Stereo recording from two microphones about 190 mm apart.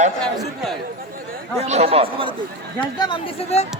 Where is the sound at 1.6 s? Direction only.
35° right (ahead or behind).